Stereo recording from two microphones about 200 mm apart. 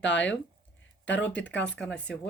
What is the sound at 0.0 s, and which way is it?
Speech, 65° left (ahead or behind).